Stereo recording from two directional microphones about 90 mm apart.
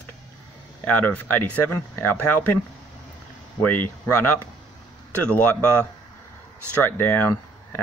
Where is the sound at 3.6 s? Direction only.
20° left (ahead or behind).